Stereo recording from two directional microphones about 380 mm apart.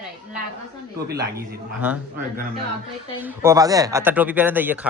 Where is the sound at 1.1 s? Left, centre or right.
Right.